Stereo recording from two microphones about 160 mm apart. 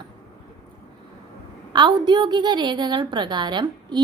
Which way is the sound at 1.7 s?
30° right (ahead or behind).